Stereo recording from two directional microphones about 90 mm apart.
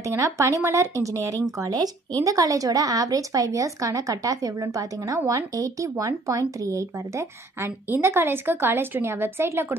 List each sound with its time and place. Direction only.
0.0 s a woman's voice: 35° right (ahead or behind)